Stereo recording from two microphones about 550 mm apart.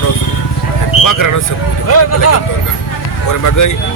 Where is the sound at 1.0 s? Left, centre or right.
Left.